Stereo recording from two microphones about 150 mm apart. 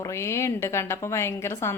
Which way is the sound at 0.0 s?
20° left (ahead or behind).